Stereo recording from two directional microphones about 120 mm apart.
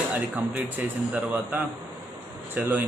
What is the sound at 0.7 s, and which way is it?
Speech, 15° right (ahead or behind).